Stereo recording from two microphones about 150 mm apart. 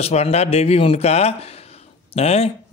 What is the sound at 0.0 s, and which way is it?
A man's voice, 45° left (ahead or behind).